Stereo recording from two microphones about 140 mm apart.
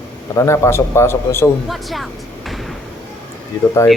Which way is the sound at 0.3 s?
20° left (ahead or behind).